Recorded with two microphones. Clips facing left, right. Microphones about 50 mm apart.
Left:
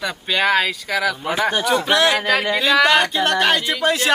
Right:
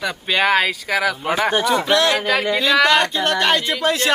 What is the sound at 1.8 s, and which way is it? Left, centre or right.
Speech, centre.